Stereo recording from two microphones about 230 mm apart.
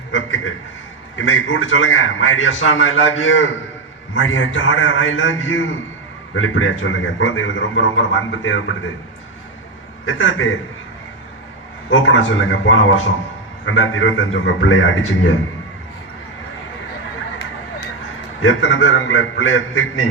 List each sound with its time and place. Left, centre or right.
0.1 s a man's voice: left
10.1 s a man's voice: left
11.9 s a man's voice: left
18.4 s a man's voice: left